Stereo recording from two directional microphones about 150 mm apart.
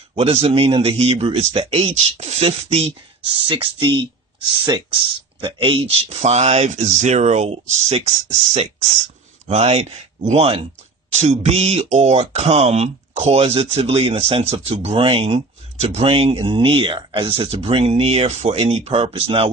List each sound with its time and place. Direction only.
0.2 s speech: 40° right (ahead or behind)
9.5 s speech: 45° right (ahead or behind)